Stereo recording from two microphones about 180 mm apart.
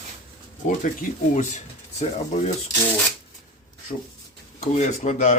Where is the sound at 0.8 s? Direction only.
45° left (ahead or behind).